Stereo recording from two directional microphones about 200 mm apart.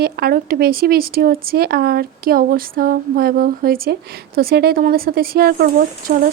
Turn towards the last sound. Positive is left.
turn(degrees=-50)  # may be behind; listen again after turning